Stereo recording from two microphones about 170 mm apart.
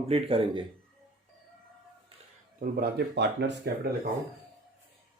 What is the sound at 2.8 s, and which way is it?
Speech, 75° right (ahead or behind).